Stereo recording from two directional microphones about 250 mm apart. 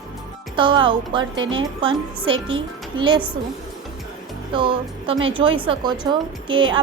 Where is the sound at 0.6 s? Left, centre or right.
Centre.